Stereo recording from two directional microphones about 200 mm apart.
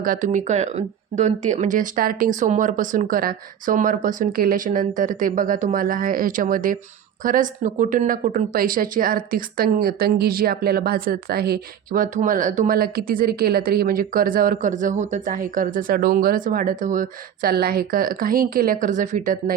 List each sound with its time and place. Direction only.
0.0 s a woman's voice: 40° right (ahead or behind)